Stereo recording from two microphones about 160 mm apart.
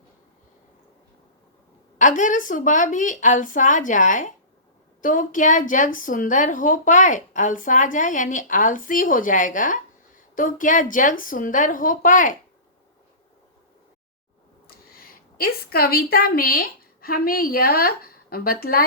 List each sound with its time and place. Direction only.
2.0 s a woman's voice: 50° left (ahead or behind)
14.7 s a woman's voice: 70° left (ahead or behind)